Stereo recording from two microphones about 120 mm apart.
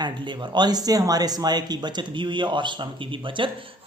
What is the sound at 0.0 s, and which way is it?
Speech, 40° right (ahead or behind).